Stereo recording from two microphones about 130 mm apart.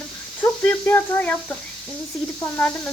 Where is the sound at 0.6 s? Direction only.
15° left (ahead or behind).